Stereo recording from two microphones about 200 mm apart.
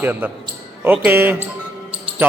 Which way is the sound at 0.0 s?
10° right (ahead or behind).